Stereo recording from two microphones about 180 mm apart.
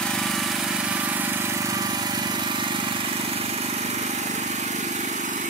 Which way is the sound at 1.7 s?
20° right (ahead or behind).